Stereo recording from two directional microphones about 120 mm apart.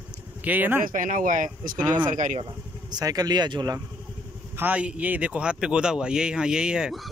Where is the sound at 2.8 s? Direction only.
35° right (ahead or behind).